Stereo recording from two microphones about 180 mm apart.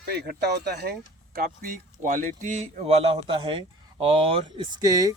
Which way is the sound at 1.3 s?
50° right (ahead or behind).